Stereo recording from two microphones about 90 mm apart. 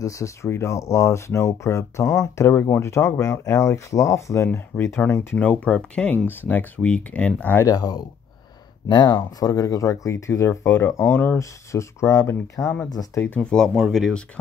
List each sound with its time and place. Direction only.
0.0 s speech: 35° left (ahead or behind); by 7.6 s 20° left (ahead or behind)
7.6 s speech: 45° left (ahead or behind)
13.2 s speech: 15° left (ahead or behind)
13.7 s speech: centre (ahead or behind)